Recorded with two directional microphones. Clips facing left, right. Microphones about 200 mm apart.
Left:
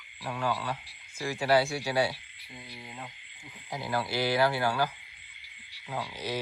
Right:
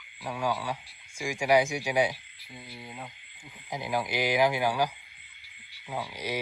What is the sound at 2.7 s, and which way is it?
Speech, 5° right (ahead or behind).